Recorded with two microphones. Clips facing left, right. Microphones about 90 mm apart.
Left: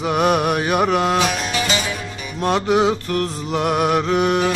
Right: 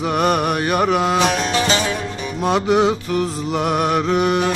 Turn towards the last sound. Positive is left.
turn(degrees=0)  # may be behind; listen again after turning